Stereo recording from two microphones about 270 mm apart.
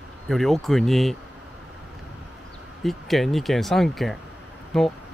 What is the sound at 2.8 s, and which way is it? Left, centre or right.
Speech, centre.